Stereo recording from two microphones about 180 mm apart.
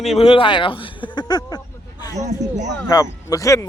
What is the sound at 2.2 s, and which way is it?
Speech, 40° right (ahead or behind).